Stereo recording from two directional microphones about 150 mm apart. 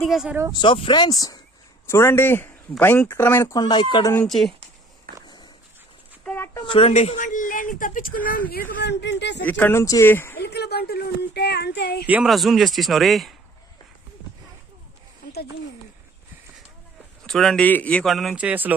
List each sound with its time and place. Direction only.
0.0 s speech: centre (ahead or behind)
0.5 s speech: 30° left (ahead or behind)
4.1 s speech: 5° left (ahead or behind)
5.1 s walk: 80° right
6.2 s a sound: 15° left (ahead or behind)
6.6 s speech: 35° left (ahead or behind); by 8.8 s 75° left (ahead or behind)
9.4 s speech: 10° left (ahead or behind)
10.4 s speech: 90° left
12.0 s speech: 10° right (ahead or behind)
17.2 s speech: 5° left (ahead or behind)
18.4 s speech: 10° right (ahead or behind)